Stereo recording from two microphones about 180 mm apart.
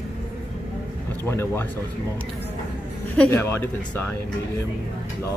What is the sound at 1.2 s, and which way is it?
Speech, 15° left (ahead or behind).